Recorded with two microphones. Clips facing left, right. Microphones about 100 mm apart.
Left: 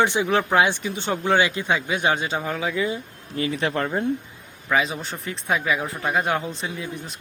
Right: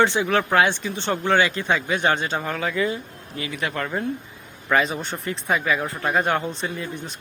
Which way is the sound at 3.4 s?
30° left (ahead or behind).